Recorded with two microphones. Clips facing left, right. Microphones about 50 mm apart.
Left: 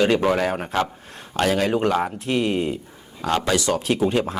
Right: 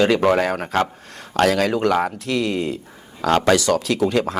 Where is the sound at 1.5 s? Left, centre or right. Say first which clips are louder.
Right 2 dB; right.